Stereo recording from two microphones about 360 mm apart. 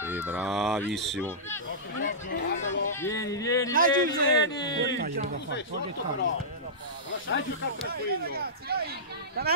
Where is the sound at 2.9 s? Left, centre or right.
Centre.